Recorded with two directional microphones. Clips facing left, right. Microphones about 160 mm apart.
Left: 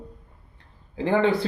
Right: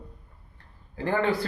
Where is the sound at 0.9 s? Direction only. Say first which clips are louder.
Left 4 dB; 20° left (ahead or behind).